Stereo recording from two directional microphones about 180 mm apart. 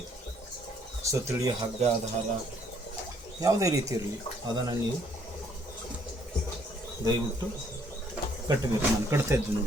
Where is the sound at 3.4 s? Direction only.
20° right (ahead or behind).